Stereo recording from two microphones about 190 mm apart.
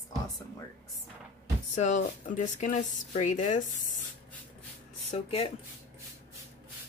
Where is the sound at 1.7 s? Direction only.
40° left (ahead or behind).